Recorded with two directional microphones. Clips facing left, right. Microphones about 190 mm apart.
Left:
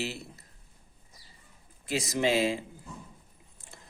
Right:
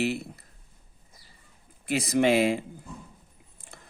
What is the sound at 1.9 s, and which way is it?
Speech, 60° right (ahead or behind).